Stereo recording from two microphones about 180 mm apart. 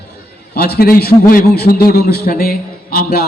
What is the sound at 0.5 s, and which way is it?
A man's voice, 60° left (ahead or behind).